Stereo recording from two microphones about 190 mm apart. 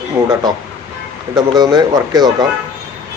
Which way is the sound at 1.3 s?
20° right (ahead or behind).